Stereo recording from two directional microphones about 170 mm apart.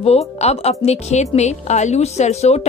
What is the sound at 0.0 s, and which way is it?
A woman's voice, 40° left (ahead or behind).